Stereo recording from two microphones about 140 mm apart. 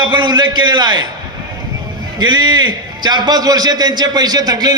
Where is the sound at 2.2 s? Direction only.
30° right (ahead or behind).